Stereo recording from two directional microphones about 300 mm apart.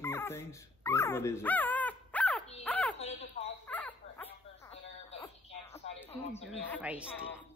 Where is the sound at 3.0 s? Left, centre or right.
Left.